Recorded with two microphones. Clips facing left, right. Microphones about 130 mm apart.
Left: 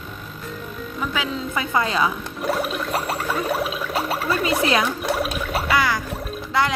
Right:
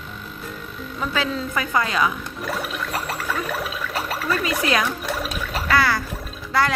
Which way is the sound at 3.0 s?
30° left (ahead or behind).